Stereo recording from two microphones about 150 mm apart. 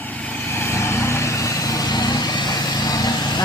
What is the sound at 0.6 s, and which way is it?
Vehicle, 15° left (ahead or behind).